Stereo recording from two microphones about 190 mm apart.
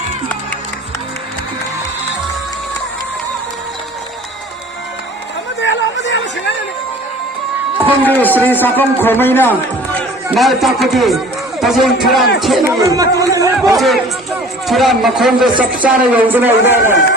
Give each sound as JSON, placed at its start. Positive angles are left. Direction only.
{"t": 5.5, "sound": "chatter", "side_deg": 70}
{"t": 8.2, "sound": "a man's voice", "side_deg": 10}
{"t": 10.3, "sound": "a man's voice", "side_deg": 0}
{"t": 12.9, "sound": "speech", "side_deg": -20}
{"t": 13.7, "sound": "a man's voice", "side_deg": 0}